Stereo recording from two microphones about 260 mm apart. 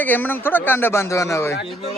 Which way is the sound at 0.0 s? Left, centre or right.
Centre.